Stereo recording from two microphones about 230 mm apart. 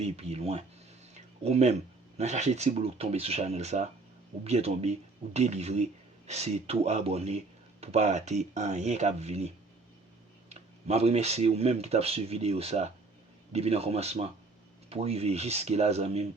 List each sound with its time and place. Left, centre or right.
0.0 s speech: right
1.1 s a sound: right
2.1 s speech: right
10.5 s speech: right